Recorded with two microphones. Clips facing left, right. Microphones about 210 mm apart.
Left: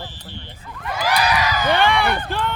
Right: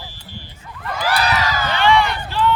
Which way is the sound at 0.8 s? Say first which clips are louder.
Even; 5° left (ahead or behind).